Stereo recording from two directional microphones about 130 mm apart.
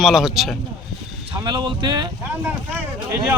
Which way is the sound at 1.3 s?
35° right (ahead or behind).